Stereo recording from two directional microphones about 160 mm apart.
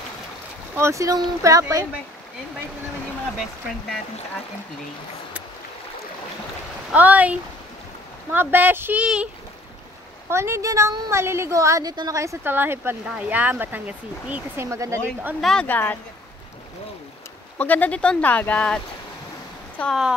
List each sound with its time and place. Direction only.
0.7 s speech: 20° right (ahead or behind)
6.9 s a woman's voice: 10° right (ahead or behind)
10.3 s a woman's voice: 15° right (ahead or behind)
15.4 s speech: 5° left (ahead or behind)
17.6 s speech: 10° left (ahead or behind)
19.8 s speech: centre (ahead or behind)